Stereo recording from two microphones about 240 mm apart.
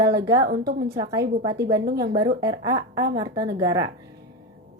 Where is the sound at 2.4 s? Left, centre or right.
Centre.